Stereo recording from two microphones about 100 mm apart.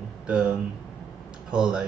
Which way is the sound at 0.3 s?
10° right (ahead or behind).